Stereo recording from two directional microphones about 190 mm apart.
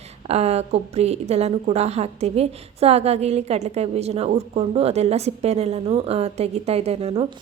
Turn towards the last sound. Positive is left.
turn(degrees=-35)  # may be behind; listen again after turning